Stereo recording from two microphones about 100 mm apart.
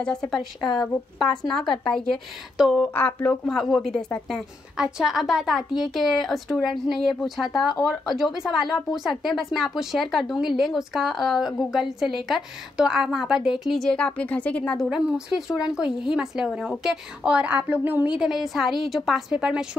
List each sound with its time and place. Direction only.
0.0 s speech: 10° left (ahead or behind)
1.5 s speech: 5° left (ahead or behind)
2.8 s speech: 20° left (ahead or behind)
3.4 s speech: centre (ahead or behind)
13.8 s speech: 10° left (ahead or behind)
14.8 s speech: 5° right (ahead or behind)
18.1 s speech: 5° right (ahead or behind)